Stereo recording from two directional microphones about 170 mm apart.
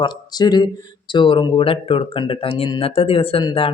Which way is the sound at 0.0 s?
25° left (ahead or behind).